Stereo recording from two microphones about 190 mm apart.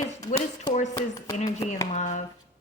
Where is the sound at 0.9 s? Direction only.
15° left (ahead or behind).